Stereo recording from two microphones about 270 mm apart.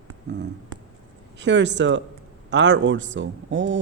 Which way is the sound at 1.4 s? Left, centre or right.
Right.